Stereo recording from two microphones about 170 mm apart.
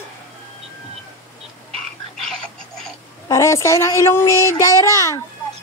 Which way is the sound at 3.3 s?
20° left (ahead or behind).